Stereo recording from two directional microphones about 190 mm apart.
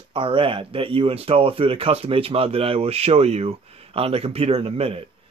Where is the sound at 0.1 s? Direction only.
25° right (ahead or behind).